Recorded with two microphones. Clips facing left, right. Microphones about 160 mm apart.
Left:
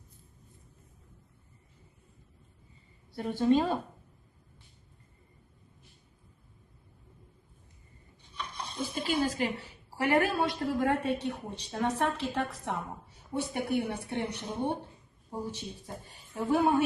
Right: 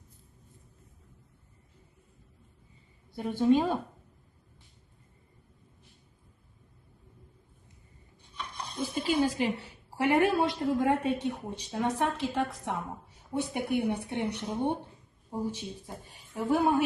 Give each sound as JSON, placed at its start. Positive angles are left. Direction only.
{"t": 3.2, "sound": "a woman's voice", "side_deg": -10}
{"t": 8.4, "sound": "dishes", "side_deg": 0}
{"t": 9.0, "sound": "a woman's voice", "side_deg": -15}
{"t": 13.3, "sound": "a woman's voice", "side_deg": -15}